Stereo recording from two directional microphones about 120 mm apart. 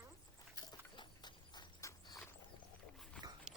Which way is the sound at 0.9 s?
40° left (ahead or behind).